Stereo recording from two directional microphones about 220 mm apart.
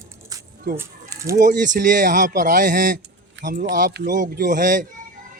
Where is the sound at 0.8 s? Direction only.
15° right (ahead or behind).